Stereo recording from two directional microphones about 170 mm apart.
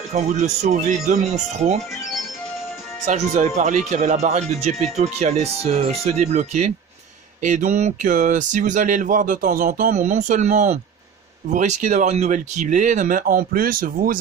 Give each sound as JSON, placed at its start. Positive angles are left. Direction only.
{"t": 0.1, "sound": "speech", "side_deg": -45}
{"t": 3.1, "sound": "speech", "side_deg": -45}
{"t": 9.9, "sound": "speech", "side_deg": -45}